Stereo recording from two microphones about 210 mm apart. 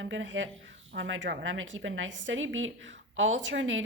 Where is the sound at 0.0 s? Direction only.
65° right (ahead or behind).